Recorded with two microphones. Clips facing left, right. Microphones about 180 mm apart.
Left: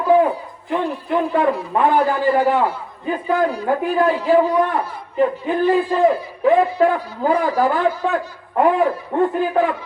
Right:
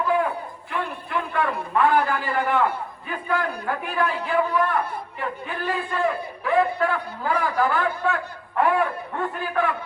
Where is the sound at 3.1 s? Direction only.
20° left (ahead or behind).